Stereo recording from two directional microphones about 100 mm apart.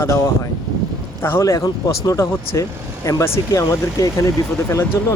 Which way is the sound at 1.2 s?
30° left (ahead or behind).